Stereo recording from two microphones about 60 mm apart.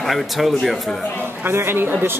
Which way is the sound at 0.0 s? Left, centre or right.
Centre.